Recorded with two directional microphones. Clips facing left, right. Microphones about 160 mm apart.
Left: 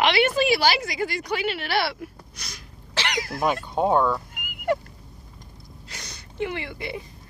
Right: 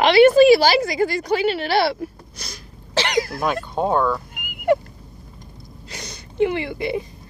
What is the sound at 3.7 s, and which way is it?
Speech, 10° left (ahead or behind).